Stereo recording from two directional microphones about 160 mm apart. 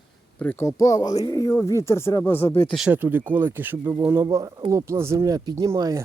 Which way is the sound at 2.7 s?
5° right (ahead or behind).